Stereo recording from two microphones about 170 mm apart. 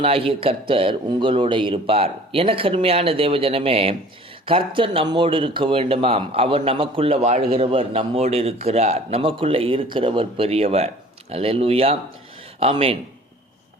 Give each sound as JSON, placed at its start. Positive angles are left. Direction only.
{"t": 0.0, "sound": "speech", "side_deg": -35}